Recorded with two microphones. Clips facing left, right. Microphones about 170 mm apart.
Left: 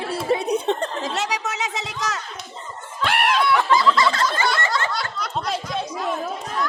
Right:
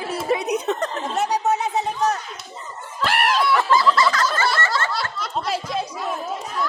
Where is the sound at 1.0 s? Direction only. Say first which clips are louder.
Right 4 dB; 90° left.